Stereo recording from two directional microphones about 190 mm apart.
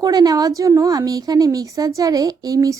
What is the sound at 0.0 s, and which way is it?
A woman's voice, 20° right (ahead or behind).